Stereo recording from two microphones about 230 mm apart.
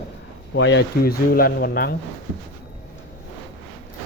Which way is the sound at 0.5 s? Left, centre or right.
Left.